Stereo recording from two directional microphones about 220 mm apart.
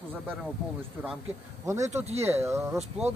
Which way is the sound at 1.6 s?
15° right (ahead or behind).